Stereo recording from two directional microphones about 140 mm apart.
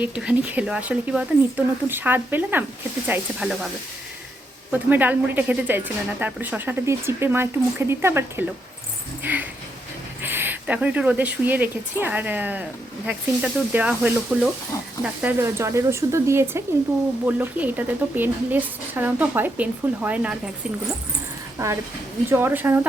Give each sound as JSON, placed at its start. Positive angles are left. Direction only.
{"t": 0.0, "sound": "speech", "side_deg": -10}
{"t": 4.7, "sound": "speech", "side_deg": -15}
{"t": 21.6, "sound": "speech", "side_deg": -20}